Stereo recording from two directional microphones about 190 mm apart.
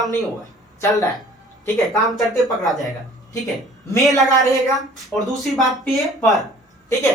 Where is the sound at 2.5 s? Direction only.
Centre (ahead or behind).